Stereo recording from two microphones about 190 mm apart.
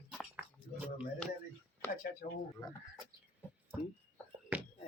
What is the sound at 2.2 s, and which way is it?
Speech, 50° left (ahead or behind).